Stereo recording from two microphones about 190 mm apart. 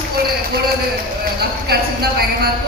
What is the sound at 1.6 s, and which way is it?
Speech, 55° right (ahead or behind).